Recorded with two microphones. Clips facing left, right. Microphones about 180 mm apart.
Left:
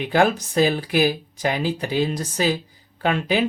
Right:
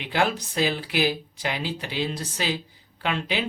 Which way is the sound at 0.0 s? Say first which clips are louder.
Left 6 dB; 45° left (ahead or behind).